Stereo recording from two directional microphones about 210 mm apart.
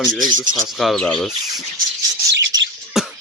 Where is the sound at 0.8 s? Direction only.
Centre (ahead or behind).